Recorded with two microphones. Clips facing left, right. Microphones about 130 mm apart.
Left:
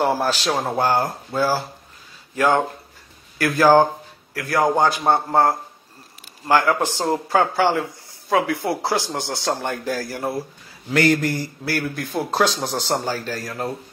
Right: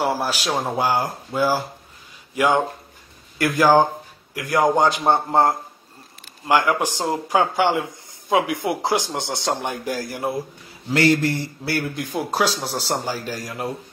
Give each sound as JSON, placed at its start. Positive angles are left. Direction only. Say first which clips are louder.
{"t": 0.0, "sound": "speech", "louder": "left 2 dB", "side_deg": -10}